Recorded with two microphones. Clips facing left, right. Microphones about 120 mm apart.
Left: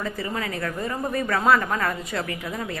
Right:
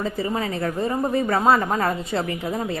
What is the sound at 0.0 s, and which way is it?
Speech, 25° right (ahead or behind).